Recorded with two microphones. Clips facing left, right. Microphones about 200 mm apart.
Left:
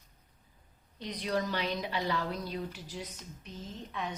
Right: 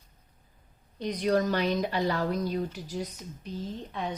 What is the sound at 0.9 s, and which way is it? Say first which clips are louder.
A woman's voice: right 7 dB; 45° right (ahead or behind).